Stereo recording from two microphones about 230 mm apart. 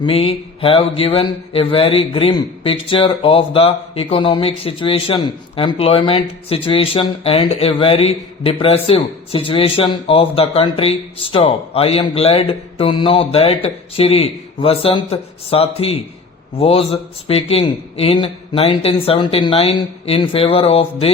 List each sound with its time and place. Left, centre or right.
0.0 s speech: left